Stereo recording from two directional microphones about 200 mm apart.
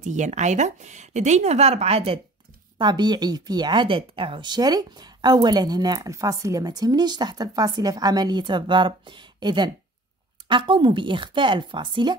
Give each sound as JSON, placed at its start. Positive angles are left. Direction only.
{"t": 0.0, "sound": "a woman's voice", "side_deg": -35}